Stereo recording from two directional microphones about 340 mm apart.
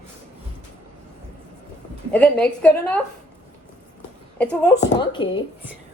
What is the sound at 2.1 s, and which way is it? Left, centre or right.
Speech, centre.